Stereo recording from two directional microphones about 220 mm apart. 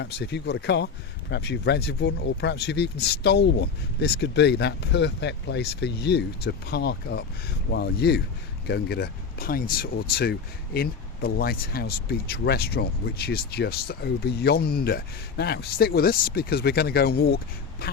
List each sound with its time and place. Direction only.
0.0 s speech: 50° left (ahead or behind)